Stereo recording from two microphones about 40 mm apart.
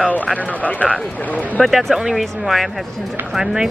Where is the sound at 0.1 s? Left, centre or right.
Left.